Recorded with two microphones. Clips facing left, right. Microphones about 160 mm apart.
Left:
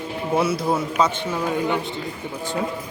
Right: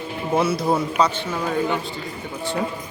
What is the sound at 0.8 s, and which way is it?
A man's voice, 5° left (ahead or behind).